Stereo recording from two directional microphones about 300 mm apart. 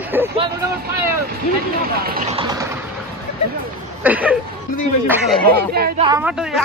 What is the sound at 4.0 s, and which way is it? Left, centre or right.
Speech, centre.